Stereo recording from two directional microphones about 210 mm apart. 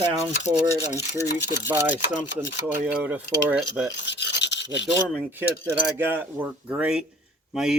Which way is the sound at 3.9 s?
55° left (ahead or behind).